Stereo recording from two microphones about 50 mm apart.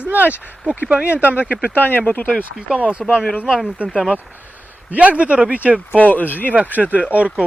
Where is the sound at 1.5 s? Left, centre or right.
Left.